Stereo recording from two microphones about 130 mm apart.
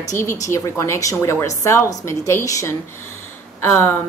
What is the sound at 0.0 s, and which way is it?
A woman's voice, 25° left (ahead or behind).